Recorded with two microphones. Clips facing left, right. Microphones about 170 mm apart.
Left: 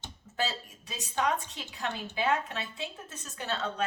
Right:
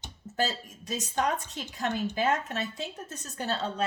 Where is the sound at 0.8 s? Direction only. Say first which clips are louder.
Right 2 dB; 45° right (ahead or behind).